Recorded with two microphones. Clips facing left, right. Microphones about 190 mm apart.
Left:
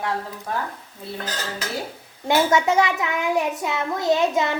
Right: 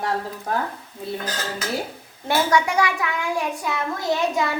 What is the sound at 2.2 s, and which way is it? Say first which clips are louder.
A child's voice: left 2 dB; 25° left (ahead or behind).